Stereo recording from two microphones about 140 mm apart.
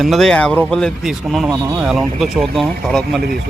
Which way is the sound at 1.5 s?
25° right (ahead or behind).